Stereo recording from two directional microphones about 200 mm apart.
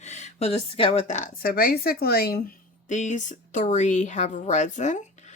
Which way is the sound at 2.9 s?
40° left (ahead or behind).